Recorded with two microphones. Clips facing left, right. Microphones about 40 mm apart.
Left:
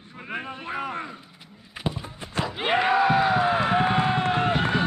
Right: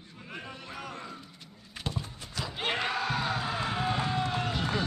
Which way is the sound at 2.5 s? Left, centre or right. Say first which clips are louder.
Left 9 dB; centre.